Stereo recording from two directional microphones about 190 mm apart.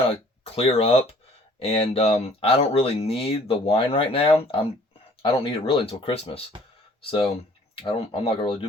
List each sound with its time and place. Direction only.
0.5 s speech: 30° left (ahead or behind)